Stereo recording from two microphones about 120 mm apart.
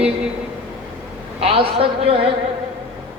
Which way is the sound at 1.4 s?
50° right (ahead or behind).